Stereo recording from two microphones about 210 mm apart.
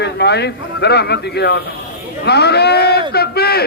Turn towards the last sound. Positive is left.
turn(degrees=50)  # may be behind; listen again after turning